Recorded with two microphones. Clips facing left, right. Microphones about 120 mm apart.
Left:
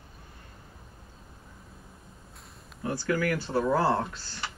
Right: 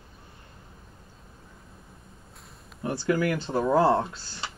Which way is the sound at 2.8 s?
25° right (ahead or behind).